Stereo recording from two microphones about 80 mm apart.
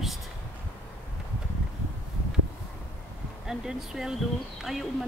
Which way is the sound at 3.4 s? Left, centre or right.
Centre.